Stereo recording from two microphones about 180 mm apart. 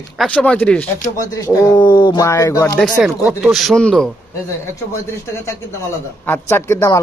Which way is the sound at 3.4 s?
Centre (ahead or behind).